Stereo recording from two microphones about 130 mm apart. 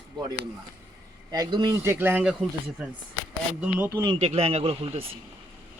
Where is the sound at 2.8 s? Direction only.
5° right (ahead or behind).